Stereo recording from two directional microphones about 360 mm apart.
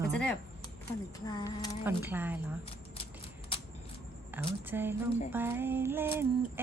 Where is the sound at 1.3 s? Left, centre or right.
Centre.